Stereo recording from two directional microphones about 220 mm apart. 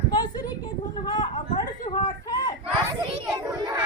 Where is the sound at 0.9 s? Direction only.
20° left (ahead or behind).